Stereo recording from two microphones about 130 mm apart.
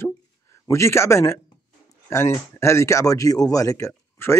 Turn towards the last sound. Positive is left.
turn(degrees=20)  # may be behind; listen again after turning